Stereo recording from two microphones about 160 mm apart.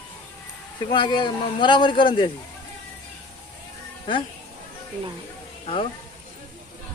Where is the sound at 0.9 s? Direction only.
30° left (ahead or behind).